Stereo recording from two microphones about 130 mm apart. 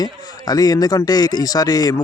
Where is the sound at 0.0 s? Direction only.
30° left (ahead or behind).